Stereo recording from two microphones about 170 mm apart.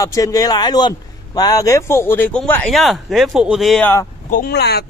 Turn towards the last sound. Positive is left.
turn(degrees=70)  # may be behind; listen again after turning